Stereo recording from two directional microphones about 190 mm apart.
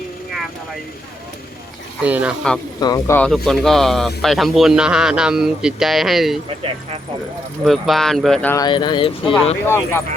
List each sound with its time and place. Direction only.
2.0 s speech: 5° right (ahead or behind)
2.8 s speech: 15° left (ahead or behind); by 6.4 s centre (ahead or behind)
7.6 s speech: centre (ahead or behind)
8.6 s speech: 25° left (ahead or behind)
9.6 s speech: 15° left (ahead or behind)